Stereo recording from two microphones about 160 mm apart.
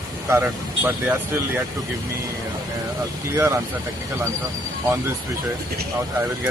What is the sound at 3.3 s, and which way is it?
Speech, 15° right (ahead or behind).